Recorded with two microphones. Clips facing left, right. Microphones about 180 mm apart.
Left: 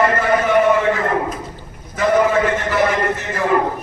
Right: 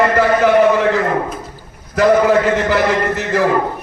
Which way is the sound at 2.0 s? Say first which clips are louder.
Right 4 dB; 75° right (ahead or behind).